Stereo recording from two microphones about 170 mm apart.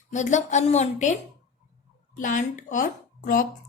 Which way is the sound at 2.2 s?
50° left (ahead or behind).